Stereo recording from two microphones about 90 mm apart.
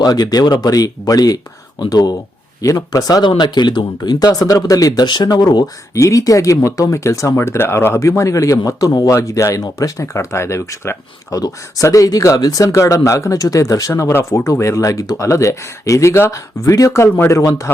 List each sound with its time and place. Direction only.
0.0 s speech: 45° left (ahead or behind)
5.9 s speech: 35° left (ahead or behind)
9.1 s speech: 35° left (ahead or behind)